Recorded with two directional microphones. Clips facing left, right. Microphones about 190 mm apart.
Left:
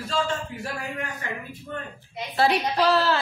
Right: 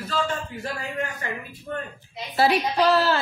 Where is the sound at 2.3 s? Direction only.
Centre (ahead or behind).